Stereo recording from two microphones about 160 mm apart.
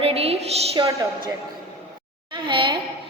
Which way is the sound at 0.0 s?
40° right (ahead or behind).